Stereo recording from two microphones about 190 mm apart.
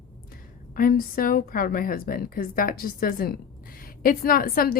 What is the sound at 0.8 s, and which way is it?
A woman's voice, 50° left (ahead or behind).